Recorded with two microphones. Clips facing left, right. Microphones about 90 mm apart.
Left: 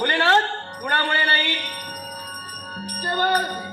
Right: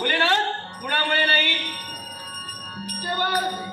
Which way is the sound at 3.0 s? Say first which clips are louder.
Left 4 dB; 30° left (ahead or behind).